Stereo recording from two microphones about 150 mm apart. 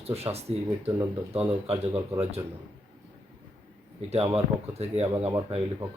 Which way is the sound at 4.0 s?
45° right (ahead or behind).